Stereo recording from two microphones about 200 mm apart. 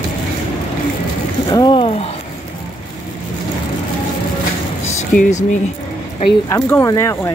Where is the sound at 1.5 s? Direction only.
20° left (ahead or behind).